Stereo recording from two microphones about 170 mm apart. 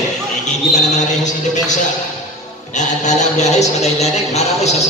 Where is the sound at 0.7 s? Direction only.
45° left (ahead or behind).